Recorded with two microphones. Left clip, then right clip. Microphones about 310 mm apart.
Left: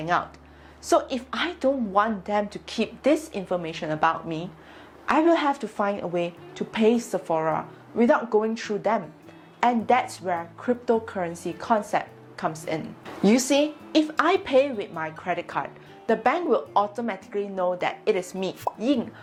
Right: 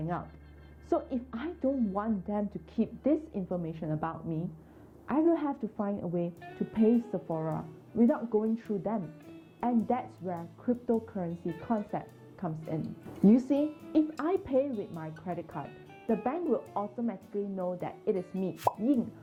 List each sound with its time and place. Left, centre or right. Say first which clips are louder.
0.0 s a woman's voice: left 12 dB; centre
16.7 s speech: left 12 dB; left
17.1 s a woman's voice: left 7 dB; centre